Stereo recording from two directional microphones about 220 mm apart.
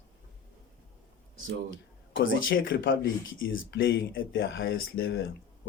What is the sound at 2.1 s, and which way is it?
Speech, 60° left (ahead or behind).